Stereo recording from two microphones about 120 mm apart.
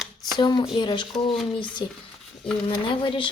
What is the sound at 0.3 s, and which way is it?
Speech, 40° left (ahead or behind).